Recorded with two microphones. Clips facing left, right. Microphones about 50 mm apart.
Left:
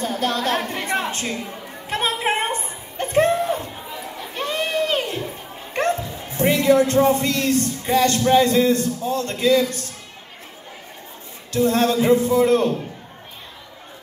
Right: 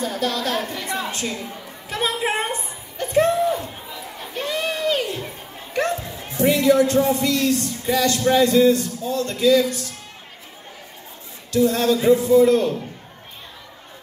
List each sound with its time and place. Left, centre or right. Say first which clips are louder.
0.0 s a sound: left 1 dB; left
4.3 s crowd: left 1 dB; left
5.7 s speech: left 1 dB; left
11.5 s speech: even; left